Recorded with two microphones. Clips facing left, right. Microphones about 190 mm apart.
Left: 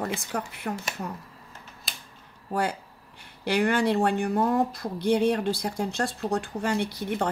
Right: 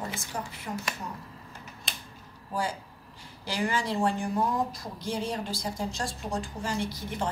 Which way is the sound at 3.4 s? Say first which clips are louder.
Left 7 dB; 65° left (ahead or behind).